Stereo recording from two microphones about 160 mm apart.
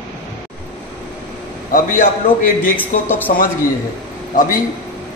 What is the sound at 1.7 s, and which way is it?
Speech, 60° left (ahead or behind).